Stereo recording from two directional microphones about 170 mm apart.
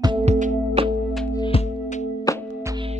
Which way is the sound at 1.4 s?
35° left (ahead or behind).